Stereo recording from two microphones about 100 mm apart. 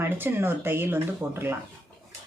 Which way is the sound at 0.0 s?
20° right (ahead or behind).